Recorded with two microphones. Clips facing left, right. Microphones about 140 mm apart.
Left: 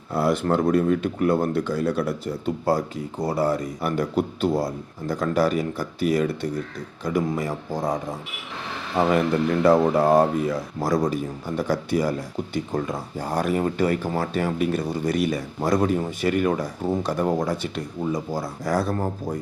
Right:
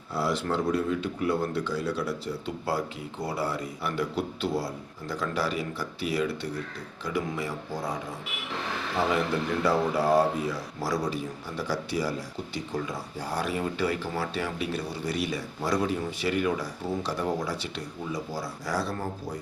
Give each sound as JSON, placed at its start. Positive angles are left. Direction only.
{"t": 0.1, "sound": "speech", "side_deg": 50}
{"t": 9.0, "sound": "speech", "side_deg": 50}